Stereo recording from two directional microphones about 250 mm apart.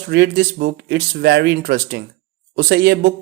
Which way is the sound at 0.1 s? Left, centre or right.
Right.